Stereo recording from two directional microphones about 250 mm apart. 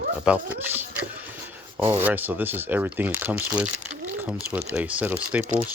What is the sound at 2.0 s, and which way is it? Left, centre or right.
Speech, centre.